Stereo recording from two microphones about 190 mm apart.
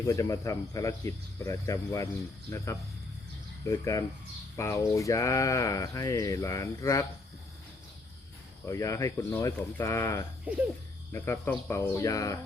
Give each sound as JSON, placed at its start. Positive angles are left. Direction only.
{"t": 0.0, "sound": "speech", "side_deg": 15}
{"t": 8.6, "sound": "speech", "side_deg": 15}
{"t": 10.5, "sound": "speech", "side_deg": -5}
{"t": 11.1, "sound": "speech", "side_deg": 15}